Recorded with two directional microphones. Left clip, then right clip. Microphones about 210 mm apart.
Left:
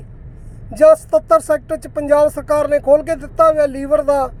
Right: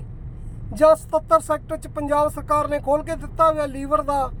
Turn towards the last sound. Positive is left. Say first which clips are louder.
# left 6 dB
turn(degrees=15)  # may be behind; listen again after turning